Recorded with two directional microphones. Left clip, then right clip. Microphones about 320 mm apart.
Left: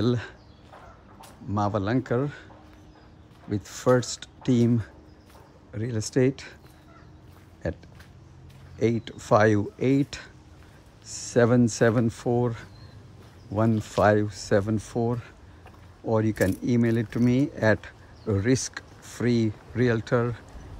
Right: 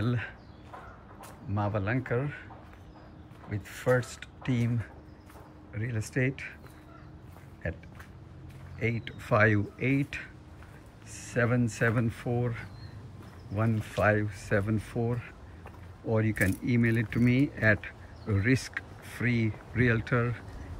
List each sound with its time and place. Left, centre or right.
0.0 s speech: centre
1.5 s speech: centre
3.5 s speech: centre
8.7 s speech: centre